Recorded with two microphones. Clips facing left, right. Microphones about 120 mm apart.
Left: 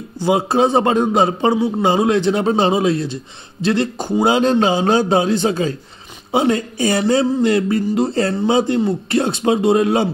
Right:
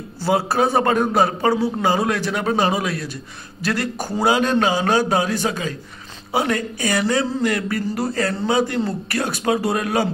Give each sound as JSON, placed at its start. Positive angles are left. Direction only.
{"t": 0.2, "sound": "a man's voice", "side_deg": 20}